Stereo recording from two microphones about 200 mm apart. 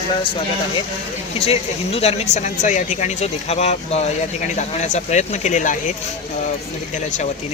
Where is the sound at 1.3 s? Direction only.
30° left (ahead or behind).